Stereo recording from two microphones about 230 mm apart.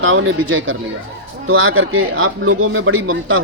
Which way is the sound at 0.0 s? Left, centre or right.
Right.